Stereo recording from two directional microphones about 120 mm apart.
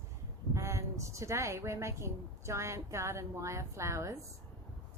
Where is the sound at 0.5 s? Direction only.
25° right (ahead or behind).